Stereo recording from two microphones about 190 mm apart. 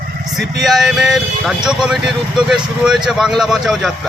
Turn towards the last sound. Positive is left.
turn(degrees=0)  # may be behind; listen again after turning